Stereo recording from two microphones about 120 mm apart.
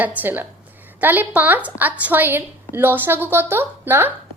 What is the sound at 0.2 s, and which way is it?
A woman's voice, 15° right (ahead or behind).